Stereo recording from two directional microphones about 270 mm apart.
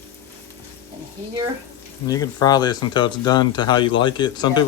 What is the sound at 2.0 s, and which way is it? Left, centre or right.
Speech, centre.